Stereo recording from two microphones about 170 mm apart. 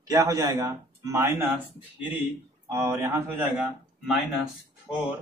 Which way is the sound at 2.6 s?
15° right (ahead or behind).